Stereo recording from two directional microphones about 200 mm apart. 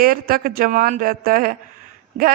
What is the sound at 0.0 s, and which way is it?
A man's voice, 45° right (ahead or behind).